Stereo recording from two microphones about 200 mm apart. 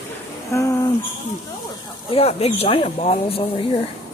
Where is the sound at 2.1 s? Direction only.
30° left (ahead or behind).